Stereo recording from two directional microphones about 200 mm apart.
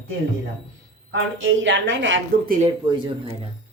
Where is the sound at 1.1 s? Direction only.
70° right (ahead or behind).